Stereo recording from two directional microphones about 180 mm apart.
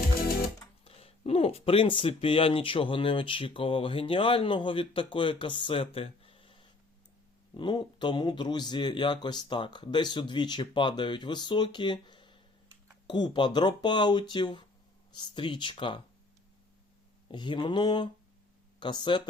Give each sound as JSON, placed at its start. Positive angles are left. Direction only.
{"t": 0.9, "sound": "speech", "side_deg": 35}
{"t": 17.2, "sound": "speech", "side_deg": 25}